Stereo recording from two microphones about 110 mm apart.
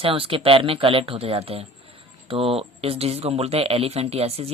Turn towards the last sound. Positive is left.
turn(degrees=-65)  # may be behind; listen again after turning